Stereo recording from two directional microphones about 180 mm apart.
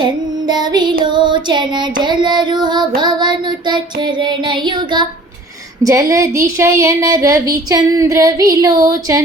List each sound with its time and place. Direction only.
0.0 s speech: 25° right (ahead or behind)